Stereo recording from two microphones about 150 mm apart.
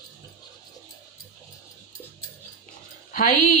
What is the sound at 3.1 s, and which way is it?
Speech, 65° left (ahead or behind).